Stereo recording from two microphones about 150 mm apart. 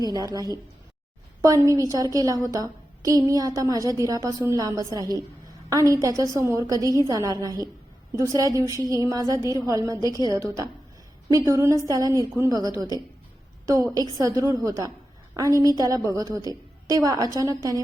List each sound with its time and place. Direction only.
0.0 s a woman's voice: 25° right (ahead or behind)
14.2 s a woman's voice: 25° right (ahead or behind)